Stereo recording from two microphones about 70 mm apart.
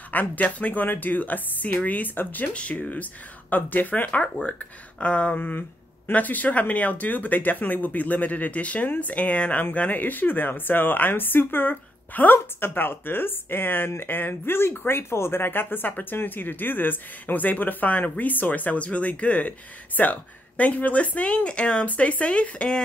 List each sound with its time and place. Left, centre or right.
0.1 s speech: left